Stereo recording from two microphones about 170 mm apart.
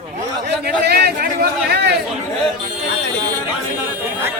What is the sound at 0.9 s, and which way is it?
Speech, 70° right (ahead or behind).